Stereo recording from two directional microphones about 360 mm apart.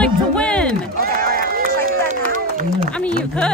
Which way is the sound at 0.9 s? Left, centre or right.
Right.